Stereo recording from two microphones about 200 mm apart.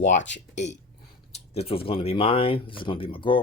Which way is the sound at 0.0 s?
40° left (ahead or behind).